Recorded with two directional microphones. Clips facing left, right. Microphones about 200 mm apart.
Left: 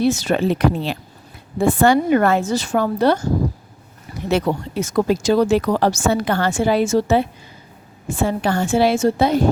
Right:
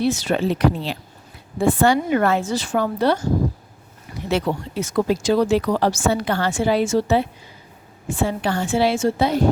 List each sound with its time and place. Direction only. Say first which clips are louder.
0.0 s speech: left 3 dB; 45° left (ahead or behind)
4.3 s speech: left 3 dB; 45° left (ahead or behind)